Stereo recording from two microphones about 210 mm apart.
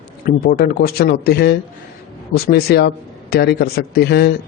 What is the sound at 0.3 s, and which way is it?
A man's voice, 45° left (ahead or behind).